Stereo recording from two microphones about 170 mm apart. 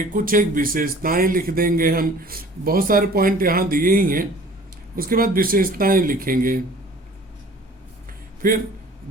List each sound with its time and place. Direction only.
0.1 s a man's voice: 55° right (ahead or behind)
8.4 s a man's voice: 55° right (ahead or behind)